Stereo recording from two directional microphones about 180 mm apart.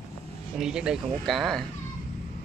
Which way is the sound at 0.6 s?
5° right (ahead or behind).